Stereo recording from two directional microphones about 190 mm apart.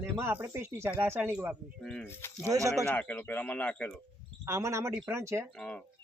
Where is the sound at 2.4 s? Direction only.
15° right (ahead or behind).